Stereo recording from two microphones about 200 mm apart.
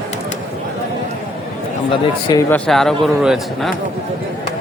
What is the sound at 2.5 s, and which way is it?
Speech, centre (ahead or behind).